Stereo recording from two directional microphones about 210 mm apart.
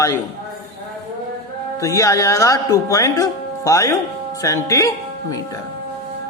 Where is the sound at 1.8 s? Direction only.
15° left (ahead or behind).